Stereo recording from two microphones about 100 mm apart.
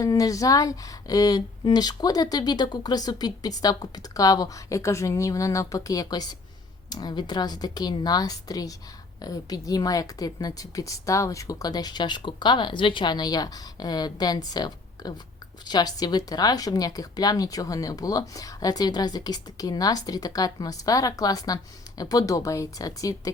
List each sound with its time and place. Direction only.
0.0 s a woman's voice: 35° left (ahead or behind)